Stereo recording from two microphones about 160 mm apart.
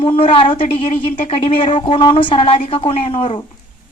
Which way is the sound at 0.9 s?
45° left (ahead or behind).